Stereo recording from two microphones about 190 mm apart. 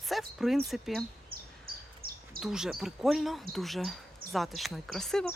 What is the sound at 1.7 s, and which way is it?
Bird, 50° right (ahead or behind).